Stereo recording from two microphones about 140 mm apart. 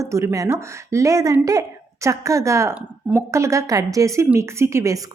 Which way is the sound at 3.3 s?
20° right (ahead or behind).